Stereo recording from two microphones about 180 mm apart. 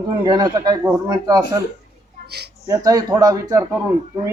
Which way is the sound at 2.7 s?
20° right (ahead or behind).